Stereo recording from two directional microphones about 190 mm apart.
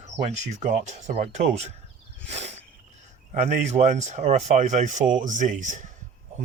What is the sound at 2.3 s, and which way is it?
Insect, 35° right (ahead or behind).